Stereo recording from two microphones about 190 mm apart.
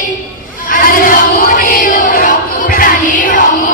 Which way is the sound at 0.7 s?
45° left (ahead or behind).